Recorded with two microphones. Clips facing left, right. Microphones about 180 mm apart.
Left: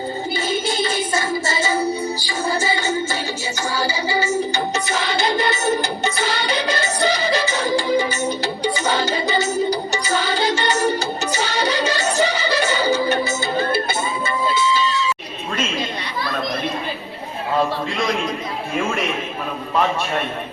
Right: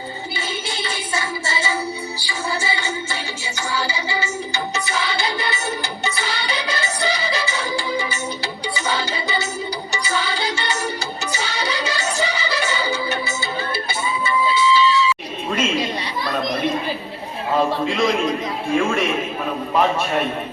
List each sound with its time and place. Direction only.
0.8 s music: 45° left (ahead or behind)